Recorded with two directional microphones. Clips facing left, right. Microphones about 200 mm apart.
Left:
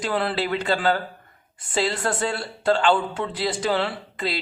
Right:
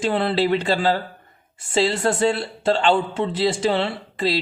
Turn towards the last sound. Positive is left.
turn(degrees=-30)  # may be behind; listen again after turning